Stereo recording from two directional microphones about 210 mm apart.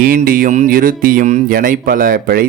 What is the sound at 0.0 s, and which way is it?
Speech, 45° right (ahead or behind).